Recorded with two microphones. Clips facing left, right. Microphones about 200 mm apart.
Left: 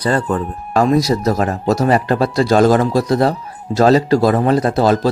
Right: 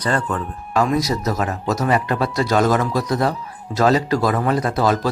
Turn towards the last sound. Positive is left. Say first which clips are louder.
# left 5 dB
turn(degrees=30)  # may be behind; listen again after turning